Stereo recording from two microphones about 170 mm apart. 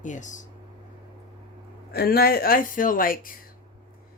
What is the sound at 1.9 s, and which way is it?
Speech, 65° left (ahead or behind).